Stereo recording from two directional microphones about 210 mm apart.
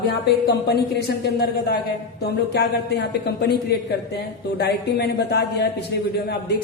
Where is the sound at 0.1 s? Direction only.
50° left (ahead or behind).